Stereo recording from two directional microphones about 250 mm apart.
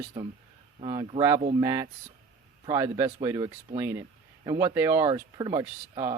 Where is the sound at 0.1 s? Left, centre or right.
Centre.